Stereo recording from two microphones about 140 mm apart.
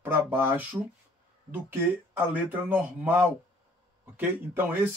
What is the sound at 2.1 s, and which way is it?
Speech, 15° right (ahead or behind).